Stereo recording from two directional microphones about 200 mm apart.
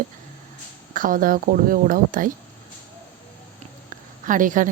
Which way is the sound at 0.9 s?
45° right (ahead or behind).